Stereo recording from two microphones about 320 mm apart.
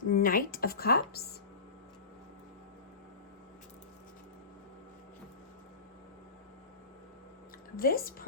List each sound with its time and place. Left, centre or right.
0.0 s speech: left
7.8 s speech: left